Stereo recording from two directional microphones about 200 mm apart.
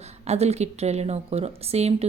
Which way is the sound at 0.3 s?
35° right (ahead or behind).